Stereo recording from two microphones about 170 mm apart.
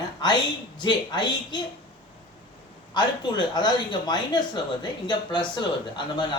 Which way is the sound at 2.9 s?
25° left (ahead or behind).